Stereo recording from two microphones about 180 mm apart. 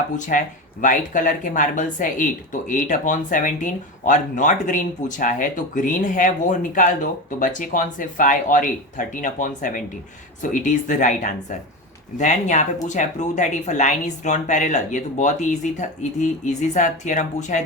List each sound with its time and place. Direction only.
0.2 s speech: 45° left (ahead or behind)